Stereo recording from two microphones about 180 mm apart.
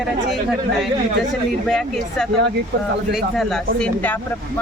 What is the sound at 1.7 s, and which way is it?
Speech, centre (ahead or behind).